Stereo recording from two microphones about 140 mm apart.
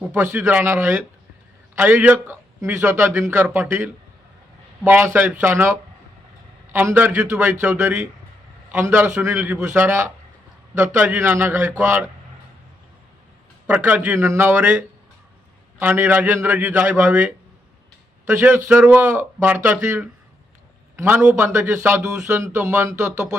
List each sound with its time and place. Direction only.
0.2 s a man's voice: 15° right (ahead or behind)
6.7 s a man's voice: 15° right (ahead or behind)
13.7 s a man's voice: 15° right (ahead or behind)
20.9 s a man's voice: 20° right (ahead or behind)